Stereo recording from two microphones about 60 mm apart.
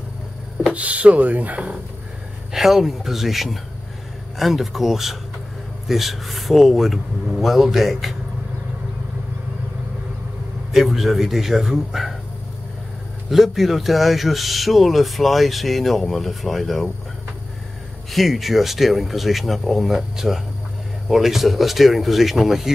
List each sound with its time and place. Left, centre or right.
0.7 s speech: right
2.5 s speech: centre
10.7 s speech: centre
13.3 s speech: centre
18.1 s speech: centre